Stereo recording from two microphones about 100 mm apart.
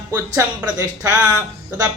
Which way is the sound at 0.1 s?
30° right (ahead or behind).